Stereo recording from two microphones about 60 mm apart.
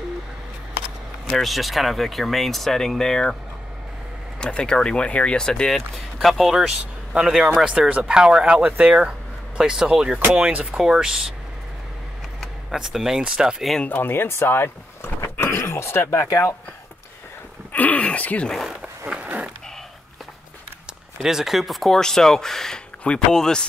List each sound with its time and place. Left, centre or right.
1.3 s speech: centre
4.4 s speech: centre
12.4 s speech: centre
13.8 s speech: left
17.7 s speech: left
18.8 s skateboard: centre
19.2 s skateboard: right
21.2 s speech: centre